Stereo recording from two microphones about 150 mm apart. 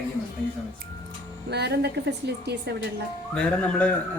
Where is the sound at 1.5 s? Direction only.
90° right.